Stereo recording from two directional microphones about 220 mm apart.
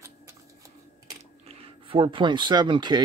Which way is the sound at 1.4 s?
25° right (ahead or behind).